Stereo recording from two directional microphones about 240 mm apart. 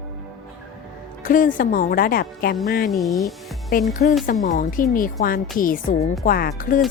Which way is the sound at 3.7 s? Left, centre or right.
Left.